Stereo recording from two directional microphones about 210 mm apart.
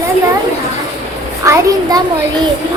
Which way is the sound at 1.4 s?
15° right (ahead or behind).